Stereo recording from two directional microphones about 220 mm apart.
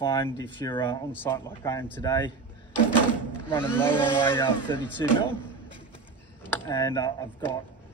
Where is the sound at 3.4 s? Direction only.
10° left (ahead or behind).